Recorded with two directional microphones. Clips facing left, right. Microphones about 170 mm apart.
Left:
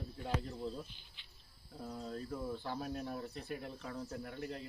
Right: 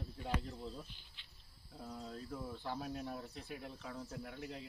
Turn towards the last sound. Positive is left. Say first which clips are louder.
# left 3 dB
turn(degrees=0)  # may be behind; listen again after turning